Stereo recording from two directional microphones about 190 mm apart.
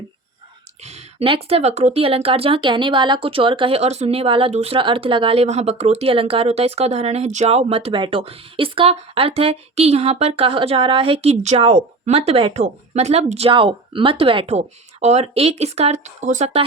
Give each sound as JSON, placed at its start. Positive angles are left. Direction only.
{"t": 0.8, "sound": "speech", "side_deg": -35}